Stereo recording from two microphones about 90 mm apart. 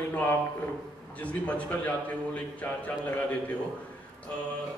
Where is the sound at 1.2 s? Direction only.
15° left (ahead or behind).